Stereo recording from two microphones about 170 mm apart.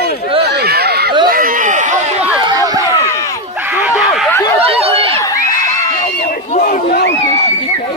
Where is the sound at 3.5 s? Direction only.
10° right (ahead or behind).